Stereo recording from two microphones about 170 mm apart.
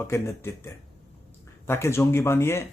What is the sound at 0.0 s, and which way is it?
Speech, 15° left (ahead or behind).